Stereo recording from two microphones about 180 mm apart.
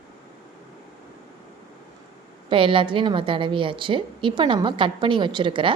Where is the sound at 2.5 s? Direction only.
30° right (ahead or behind).